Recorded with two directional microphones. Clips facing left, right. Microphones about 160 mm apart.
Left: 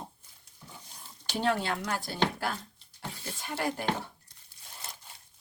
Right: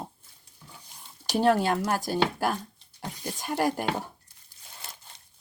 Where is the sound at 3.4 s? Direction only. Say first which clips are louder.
Right 6 dB; 45° right (ahead or behind).